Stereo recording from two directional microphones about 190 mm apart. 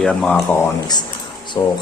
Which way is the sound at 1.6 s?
20° left (ahead or behind).